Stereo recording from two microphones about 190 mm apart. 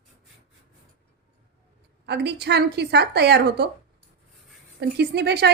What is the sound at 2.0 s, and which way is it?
A woman's voice, 60° right (ahead or behind).